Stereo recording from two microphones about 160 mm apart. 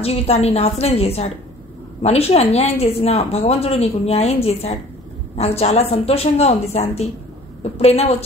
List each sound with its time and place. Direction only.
0.0 s a woman's voice: 40° left (ahead or behind)